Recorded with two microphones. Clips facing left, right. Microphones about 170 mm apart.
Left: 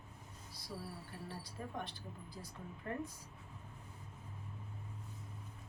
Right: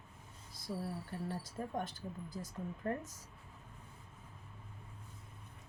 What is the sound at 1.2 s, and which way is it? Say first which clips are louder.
Speech: right 5 dB; 45° right (ahead or behind).